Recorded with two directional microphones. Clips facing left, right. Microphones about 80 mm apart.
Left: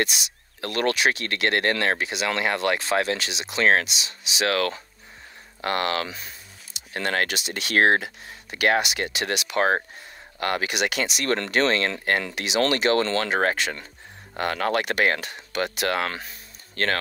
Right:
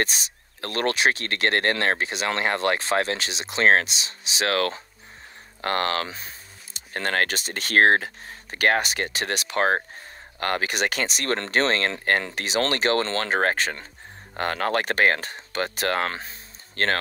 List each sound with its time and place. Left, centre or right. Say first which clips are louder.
0.0 s speech: even; right